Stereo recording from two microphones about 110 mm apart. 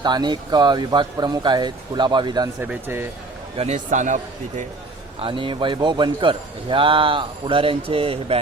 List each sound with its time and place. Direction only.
0.0 s speech: 40° right (ahead or behind)
2.8 s speech: 20° right (ahead or behind)
3.6 s a man's voice: 90° right
5.2 s a man's voice: 50° right (ahead or behind)